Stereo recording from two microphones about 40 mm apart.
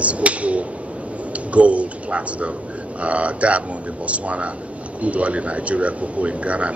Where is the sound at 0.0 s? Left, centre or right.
Right.